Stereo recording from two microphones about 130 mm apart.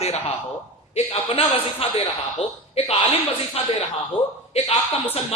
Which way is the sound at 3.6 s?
50° left (ahead or behind).